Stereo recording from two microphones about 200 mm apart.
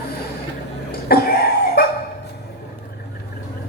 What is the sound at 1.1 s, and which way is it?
Dog, 50° left (ahead or behind).